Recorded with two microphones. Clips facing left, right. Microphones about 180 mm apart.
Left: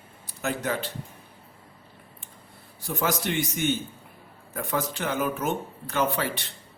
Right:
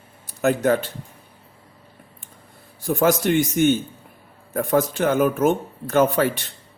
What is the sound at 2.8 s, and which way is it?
Speech, 45° right (ahead or behind).